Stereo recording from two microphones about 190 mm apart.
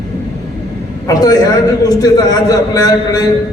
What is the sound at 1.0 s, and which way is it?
Speech, 20° left (ahead or behind).